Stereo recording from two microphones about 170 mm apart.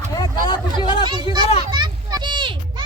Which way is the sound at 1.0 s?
25° right (ahead or behind).